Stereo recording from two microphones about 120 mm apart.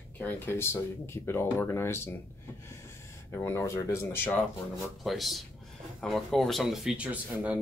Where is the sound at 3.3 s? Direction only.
20° left (ahead or behind).